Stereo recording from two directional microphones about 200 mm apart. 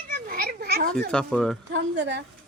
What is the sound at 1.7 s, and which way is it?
Speech, 60° right (ahead or behind).